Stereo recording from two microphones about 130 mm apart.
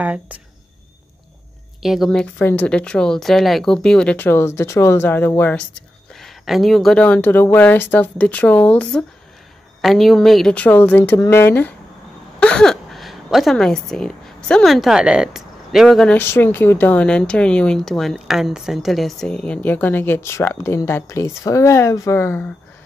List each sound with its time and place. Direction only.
0.0 s speech: 10° right (ahead or behind)
1.8 s speech: centre (ahead or behind)
9.8 s a woman's voice: centre (ahead or behind)
16.2 s speech: 15° left (ahead or behind)